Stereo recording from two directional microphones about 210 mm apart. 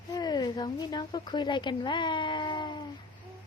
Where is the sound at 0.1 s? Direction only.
20° left (ahead or behind).